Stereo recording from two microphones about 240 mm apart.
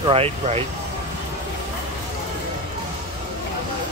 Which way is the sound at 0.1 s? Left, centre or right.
Right.